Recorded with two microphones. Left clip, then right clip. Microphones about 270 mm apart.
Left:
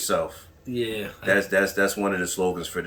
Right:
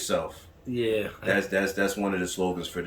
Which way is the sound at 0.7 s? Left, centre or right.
Centre.